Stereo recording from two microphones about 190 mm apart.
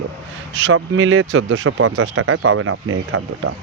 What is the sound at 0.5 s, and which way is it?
Speech, 80° right.